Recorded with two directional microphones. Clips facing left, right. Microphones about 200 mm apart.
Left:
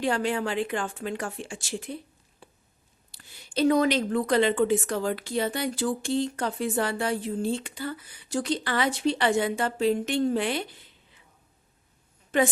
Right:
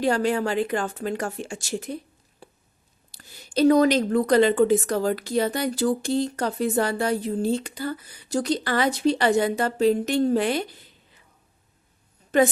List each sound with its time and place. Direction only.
0.0 s a woman's voice: 40° right (ahead or behind)
2.4 s a sound: 40° right (ahead or behind)
3.1 s a woman's voice: 40° right (ahead or behind)
12.3 s a woman's voice: 40° right (ahead or behind)